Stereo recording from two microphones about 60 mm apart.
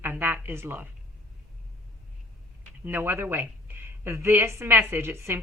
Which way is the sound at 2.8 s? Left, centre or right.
Right.